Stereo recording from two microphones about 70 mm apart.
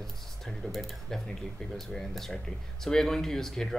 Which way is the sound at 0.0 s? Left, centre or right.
Centre.